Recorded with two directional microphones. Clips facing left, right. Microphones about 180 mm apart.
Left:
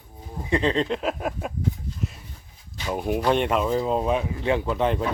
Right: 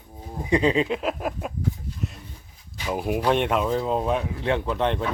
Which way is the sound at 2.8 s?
5° right (ahead or behind).